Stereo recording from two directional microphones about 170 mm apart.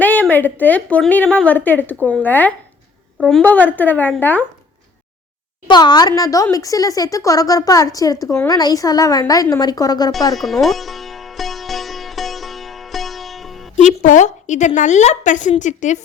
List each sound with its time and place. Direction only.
0.0 s a woman's voice: 10° left (ahead or behind)
5.6 s speech: 25° left (ahead or behind)
10.3 s sitar: centre (ahead or behind)
13.7 s a woman's voice: 45° left (ahead or behind)